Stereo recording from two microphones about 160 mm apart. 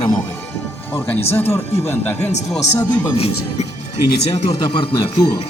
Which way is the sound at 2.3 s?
45° left (ahead or behind).